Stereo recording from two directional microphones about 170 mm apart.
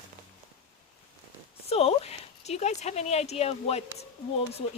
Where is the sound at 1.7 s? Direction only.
35° left (ahead or behind).